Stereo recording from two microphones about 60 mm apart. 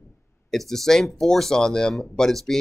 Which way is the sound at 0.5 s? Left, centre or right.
Centre.